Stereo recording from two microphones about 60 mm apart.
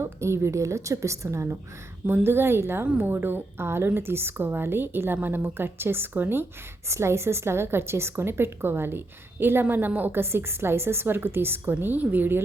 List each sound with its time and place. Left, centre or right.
0.0 s a woman's voice: right
2.2 s a woman's voice: right
6.8 s a woman's voice: right
10.1 s a woman's voice: right